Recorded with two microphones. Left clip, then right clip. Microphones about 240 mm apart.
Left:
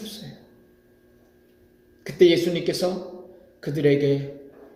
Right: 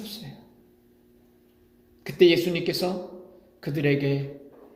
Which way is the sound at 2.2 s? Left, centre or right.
Right.